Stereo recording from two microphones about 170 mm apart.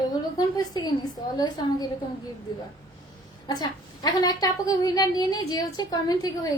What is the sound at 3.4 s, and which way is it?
A woman's voice, 25° left (ahead or behind).